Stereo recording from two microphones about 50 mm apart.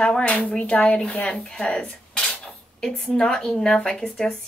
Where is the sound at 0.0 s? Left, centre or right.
Left.